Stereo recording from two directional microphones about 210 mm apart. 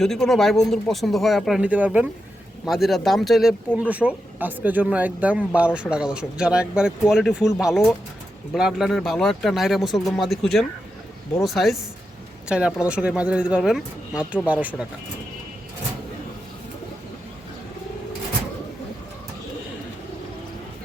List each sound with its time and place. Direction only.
0.0 s speech: centre (ahead or behind)